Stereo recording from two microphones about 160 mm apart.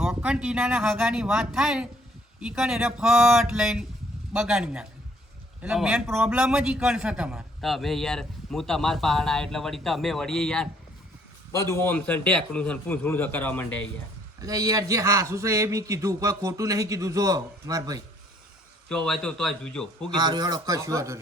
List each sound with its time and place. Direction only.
0.0 s a man's voice: 5° right (ahead or behind)
11.5 s a man's voice: 20° left (ahead or behind)
14.4 s a man's voice: 20° right (ahead or behind)
18.9 s a man's voice: 5° left (ahead or behind)
20.1 s a man's voice: 25° right (ahead or behind)